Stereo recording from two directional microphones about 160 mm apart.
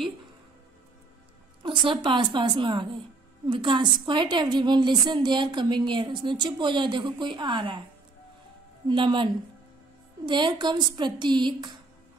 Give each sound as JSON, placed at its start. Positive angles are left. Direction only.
{"t": 1.6, "sound": "a sound", "side_deg": -30}
{"t": 2.0, "sound": "a woman's voice", "side_deg": -30}
{"t": 8.8, "sound": "a woman's voice", "side_deg": -30}